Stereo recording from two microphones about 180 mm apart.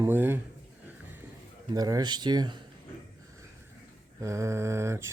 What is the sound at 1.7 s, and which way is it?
Speech, 20° right (ahead or behind).